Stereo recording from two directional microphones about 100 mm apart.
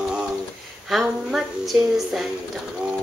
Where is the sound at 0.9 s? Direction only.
5° right (ahead or behind).